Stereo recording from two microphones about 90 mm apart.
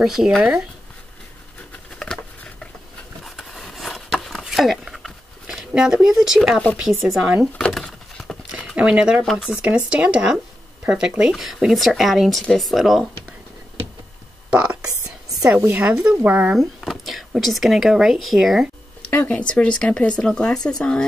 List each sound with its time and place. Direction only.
0.0 s speech: 5° right (ahead or behind)
2.0 s patter: 5° left (ahead or behind)
3.3 s a sound: centre (ahead or behind)
7.1 s speech: 10° right (ahead or behind)
7.5 s patter: 5° left (ahead or behind)
8.7 s speech: 10° right (ahead or behind)
9.2 s speech: centre (ahead or behind)
9.6 s speech: 15° right (ahead or behind)
14.5 s whispering: 15° right (ahead or behind)
15.5 s a woman's voice: 20° right (ahead or behind)
15.9 s speech: 10° right (ahead or behind)
16.5 s speech: centre (ahead or behind)
19.1 s speech: 15° left (ahead or behind)